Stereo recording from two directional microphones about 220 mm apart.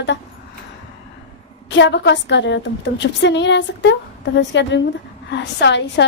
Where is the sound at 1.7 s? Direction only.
55° left (ahead or behind).